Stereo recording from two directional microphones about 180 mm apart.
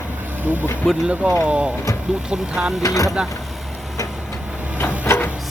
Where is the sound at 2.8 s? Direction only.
20° left (ahead or behind).